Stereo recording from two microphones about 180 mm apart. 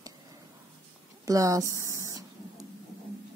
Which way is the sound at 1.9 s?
15° right (ahead or behind).